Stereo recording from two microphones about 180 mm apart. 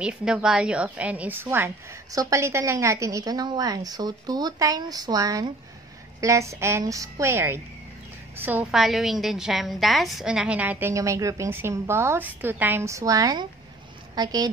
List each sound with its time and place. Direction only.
0.0 s a woman's voice: 5° right (ahead or behind); by 14.5 s 20° right (ahead or behind)